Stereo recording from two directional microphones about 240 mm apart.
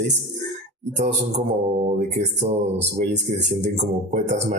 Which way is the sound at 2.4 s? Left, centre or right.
Right.